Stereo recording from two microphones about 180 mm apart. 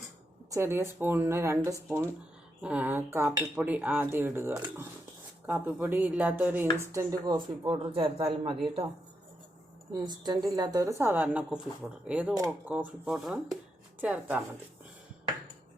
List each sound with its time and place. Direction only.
0.5 s a woman's voice: 15° right (ahead or behind)
7.6 s a man's voice: 30° right (ahead or behind)
10.0 s a woman's voice: 20° right (ahead or behind)